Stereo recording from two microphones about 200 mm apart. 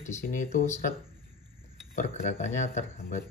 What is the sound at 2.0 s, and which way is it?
Speech, 35° left (ahead or behind).